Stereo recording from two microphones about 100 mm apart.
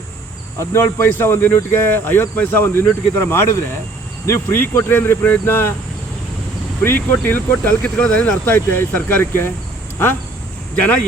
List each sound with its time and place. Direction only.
0.6 s speech: 25° left (ahead or behind)
6.8 s speech: 20° left (ahead or behind)